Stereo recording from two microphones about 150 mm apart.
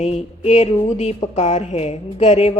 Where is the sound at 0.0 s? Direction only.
50° left (ahead or behind).